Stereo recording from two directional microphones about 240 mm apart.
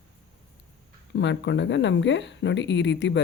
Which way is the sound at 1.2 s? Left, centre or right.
Left.